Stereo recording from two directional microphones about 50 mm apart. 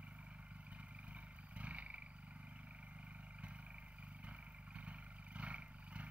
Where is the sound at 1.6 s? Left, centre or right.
Right.